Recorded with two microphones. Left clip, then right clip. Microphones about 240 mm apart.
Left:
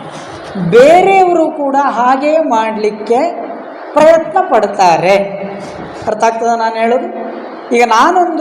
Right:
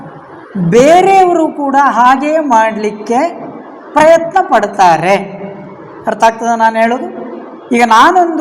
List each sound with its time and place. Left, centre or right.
0.7 s a woman's voice: right
3.9 s a woman's voice: right
6.5 s a woman's voice: right